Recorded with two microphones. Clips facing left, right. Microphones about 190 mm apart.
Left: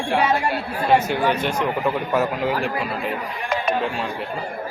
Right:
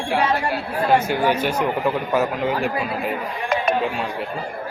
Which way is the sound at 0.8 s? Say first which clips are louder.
Even; centre (ahead or behind).